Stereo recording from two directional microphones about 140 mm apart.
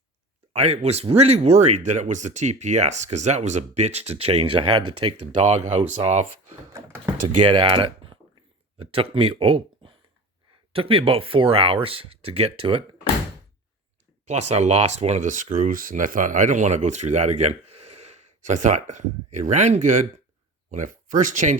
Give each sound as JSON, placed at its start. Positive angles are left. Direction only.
{"t": 0.5, "sound": "speech", "side_deg": -50}
{"t": 5.4, "sound": "speech", "side_deg": -55}
{"t": 6.7, "sound": "speech", "side_deg": -20}
{"t": 7.4, "sound": "speech", "side_deg": -35}
{"t": 14.3, "sound": "speech", "side_deg": -50}